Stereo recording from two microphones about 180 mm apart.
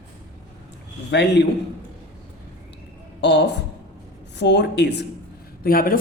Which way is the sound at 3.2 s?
70° left (ahead or behind).